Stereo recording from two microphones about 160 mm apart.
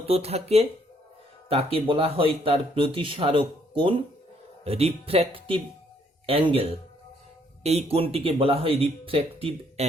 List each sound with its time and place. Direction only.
0.0 s speech: 40° right (ahead or behind)